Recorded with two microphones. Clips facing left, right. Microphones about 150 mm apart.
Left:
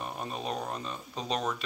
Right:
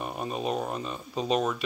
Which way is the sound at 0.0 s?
10° right (ahead or behind).